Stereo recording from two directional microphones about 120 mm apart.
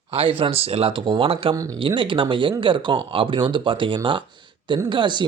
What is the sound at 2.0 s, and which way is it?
Speech, 45° right (ahead or behind).